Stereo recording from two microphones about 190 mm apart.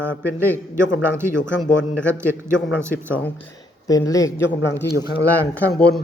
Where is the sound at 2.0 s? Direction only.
10° right (ahead or behind).